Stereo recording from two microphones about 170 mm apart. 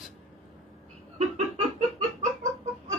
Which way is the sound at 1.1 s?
40° right (ahead or behind).